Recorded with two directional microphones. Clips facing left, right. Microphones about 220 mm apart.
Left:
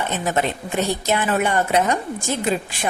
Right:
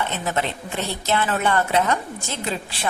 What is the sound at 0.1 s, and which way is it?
A woman's voice, 15° left (ahead or behind).